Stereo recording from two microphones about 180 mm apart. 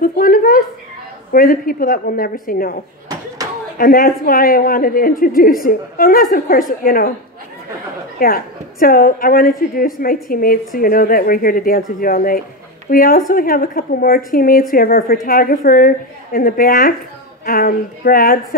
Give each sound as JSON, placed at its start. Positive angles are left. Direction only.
{"t": 0.0, "sound": "a sound", "side_deg": 50}
{"t": 1.3, "sound": "a woman's voice", "side_deg": 55}
{"t": 8.2, "sound": "a woman's voice", "side_deg": 55}